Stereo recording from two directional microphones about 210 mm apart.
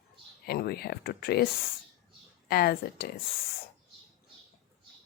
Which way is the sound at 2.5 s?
45° left (ahead or behind).